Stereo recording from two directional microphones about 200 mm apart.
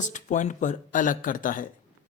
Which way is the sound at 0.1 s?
40° left (ahead or behind).